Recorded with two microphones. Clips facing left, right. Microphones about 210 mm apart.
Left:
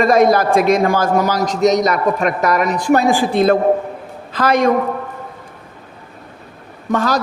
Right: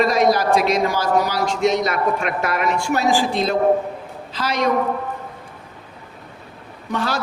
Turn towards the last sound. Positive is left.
turn(degrees=45)  # may be behind; listen again after turning